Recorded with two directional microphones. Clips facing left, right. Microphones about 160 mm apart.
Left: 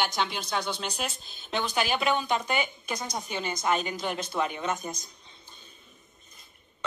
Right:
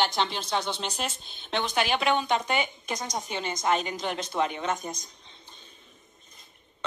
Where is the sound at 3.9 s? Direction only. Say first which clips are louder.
Even; 5° left (ahead or behind).